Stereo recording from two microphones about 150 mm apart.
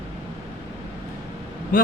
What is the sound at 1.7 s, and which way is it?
Speech, 65° left (ahead or behind).